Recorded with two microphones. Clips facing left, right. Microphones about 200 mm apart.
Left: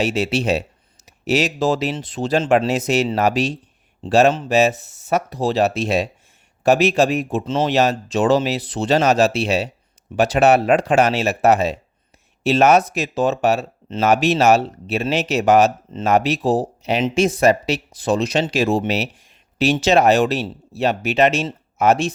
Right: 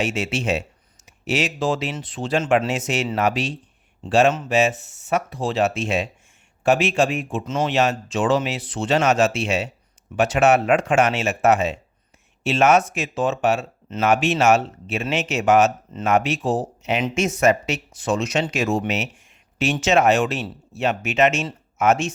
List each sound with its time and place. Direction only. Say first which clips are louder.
0.0 s speech: left 4 dB; 35° left (ahead or behind)